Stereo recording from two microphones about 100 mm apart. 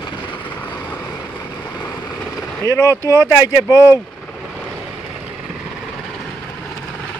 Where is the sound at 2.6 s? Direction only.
30° left (ahead or behind).